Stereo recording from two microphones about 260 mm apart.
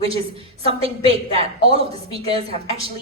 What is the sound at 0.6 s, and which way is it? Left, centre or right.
Music, right.